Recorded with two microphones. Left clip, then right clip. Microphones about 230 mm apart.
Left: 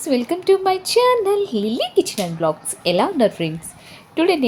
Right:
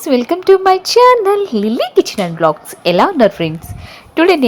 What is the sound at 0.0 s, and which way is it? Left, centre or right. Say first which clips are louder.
A woman's voice: right 7 dB; right.